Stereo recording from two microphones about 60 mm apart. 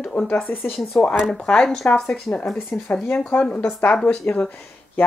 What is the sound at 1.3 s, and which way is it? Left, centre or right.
Speech, centre.